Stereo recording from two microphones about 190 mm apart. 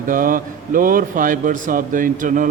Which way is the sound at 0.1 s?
45° right (ahead or behind).